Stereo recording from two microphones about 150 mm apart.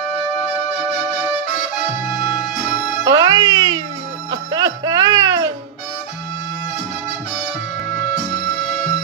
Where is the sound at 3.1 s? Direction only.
25° right (ahead or behind).